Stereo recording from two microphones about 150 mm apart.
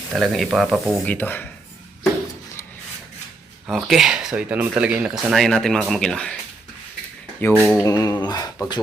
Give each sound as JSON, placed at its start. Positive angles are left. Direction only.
{"t": 0.1, "sound": "speech", "side_deg": 0}
{"t": 1.0, "sound": "speech", "side_deg": 10}
{"t": 3.7, "sound": "speech", "side_deg": 0}
{"t": 7.3, "sound": "speech", "side_deg": 15}
{"t": 7.6, "sound": "speech", "side_deg": 0}
{"t": 7.9, "sound": "speech", "side_deg": 25}